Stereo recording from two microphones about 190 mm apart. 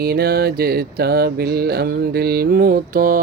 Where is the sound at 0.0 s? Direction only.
55° right (ahead or behind).